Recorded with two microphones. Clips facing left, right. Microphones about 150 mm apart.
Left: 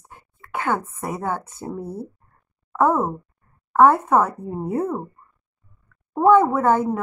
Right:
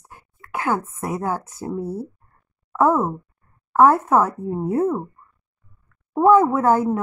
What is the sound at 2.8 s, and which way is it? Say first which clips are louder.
A woman's voice: right 1 dB; 5° right (ahead or behind).